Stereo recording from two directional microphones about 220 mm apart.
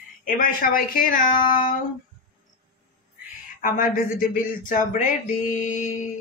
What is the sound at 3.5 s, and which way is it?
Speech, 40° left (ahead or behind).